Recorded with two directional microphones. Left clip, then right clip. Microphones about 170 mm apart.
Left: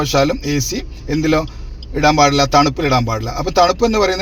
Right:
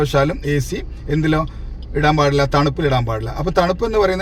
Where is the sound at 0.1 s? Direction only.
40° left (ahead or behind).